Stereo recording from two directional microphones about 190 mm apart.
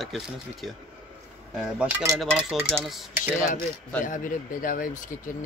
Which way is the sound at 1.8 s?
10° right (ahead or behind).